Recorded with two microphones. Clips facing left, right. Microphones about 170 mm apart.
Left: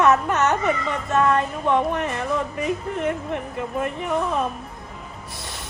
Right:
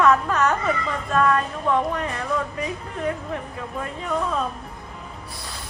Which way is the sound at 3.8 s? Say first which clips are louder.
Left 1 dB; 20° left (ahead or behind).